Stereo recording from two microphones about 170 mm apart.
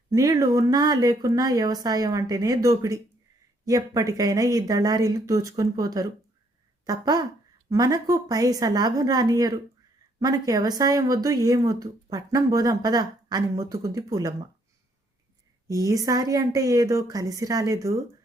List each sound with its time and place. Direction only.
0.1 s speech: 20° right (ahead or behind)
15.6 s speech: 20° right (ahead or behind)